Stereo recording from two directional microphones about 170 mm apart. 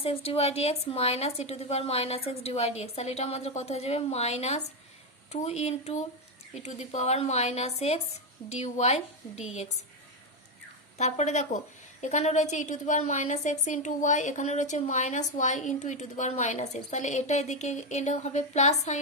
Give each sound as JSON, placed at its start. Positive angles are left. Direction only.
{"t": 0.0, "sound": "speech", "side_deg": 35}
{"t": 10.9, "sound": "a woman's voice", "side_deg": 40}